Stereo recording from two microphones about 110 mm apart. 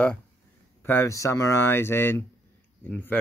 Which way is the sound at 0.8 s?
25° left (ahead or behind).